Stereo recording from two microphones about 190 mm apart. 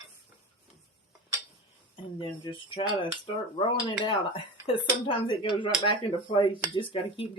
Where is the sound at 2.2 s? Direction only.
25° left (ahead or behind).